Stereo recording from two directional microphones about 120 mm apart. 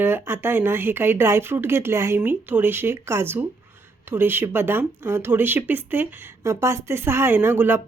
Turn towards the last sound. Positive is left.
turn(degrees=-15)  # may be behind; listen again after turning